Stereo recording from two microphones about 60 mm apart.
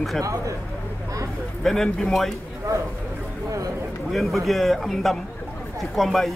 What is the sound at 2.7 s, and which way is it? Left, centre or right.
Speech, right.